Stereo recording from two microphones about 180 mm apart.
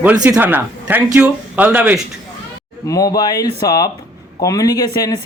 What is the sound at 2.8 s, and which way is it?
Speech, 20° left (ahead or behind).